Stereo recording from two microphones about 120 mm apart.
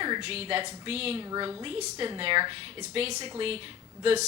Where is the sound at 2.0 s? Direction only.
45° right (ahead or behind).